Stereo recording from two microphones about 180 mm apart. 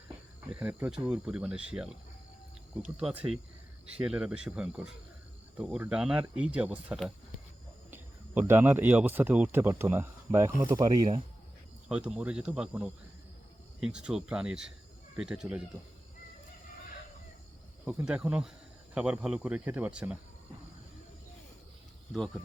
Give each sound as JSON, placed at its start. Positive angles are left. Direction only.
{"t": 0.5, "sound": "speech", "side_deg": -5}
{"t": 11.9, "sound": "speech", "side_deg": -5}
{"t": 17.8, "sound": "speech", "side_deg": -5}
{"t": 22.1, "sound": "speech", "side_deg": 0}